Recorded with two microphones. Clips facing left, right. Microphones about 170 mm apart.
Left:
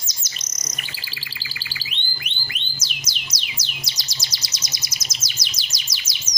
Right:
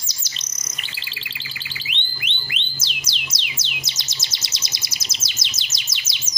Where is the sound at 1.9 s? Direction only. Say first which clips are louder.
Right 2 dB; 25° right (ahead or behind).